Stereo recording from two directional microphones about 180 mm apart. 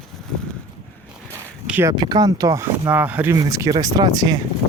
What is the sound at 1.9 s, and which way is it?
Speech, 25° right (ahead or behind).